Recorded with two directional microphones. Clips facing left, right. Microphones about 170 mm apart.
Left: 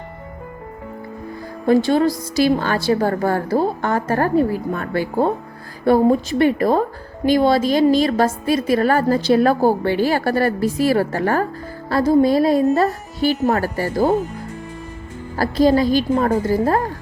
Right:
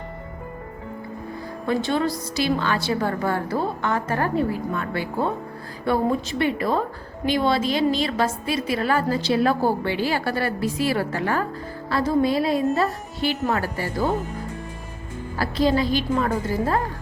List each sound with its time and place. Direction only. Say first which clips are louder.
1.6 s a woman's voice: left 8 dB; 40° left (ahead or behind)
15.4 s a woman's voice: left 6 dB; 40° left (ahead or behind)